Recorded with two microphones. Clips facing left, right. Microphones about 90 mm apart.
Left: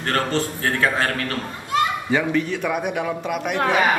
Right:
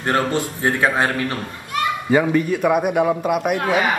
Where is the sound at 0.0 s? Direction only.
15° right (ahead or behind).